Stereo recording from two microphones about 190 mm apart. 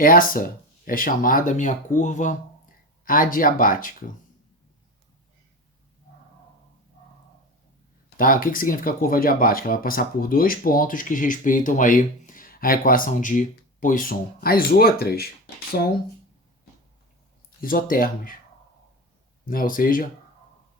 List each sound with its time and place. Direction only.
0.0 s speech: 45° left (ahead or behind)
8.1 s speech: 45° left (ahead or behind)
17.6 s speech: 50° left (ahead or behind)
19.5 s speech: 45° left (ahead or behind)